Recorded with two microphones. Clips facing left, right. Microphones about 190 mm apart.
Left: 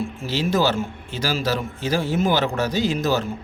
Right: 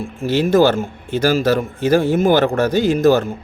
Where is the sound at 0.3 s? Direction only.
55° right (ahead or behind).